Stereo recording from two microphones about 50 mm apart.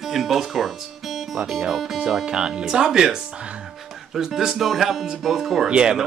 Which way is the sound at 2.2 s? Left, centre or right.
Centre.